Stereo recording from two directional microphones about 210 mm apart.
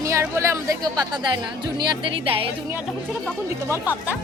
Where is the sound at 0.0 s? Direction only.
15° right (ahead or behind).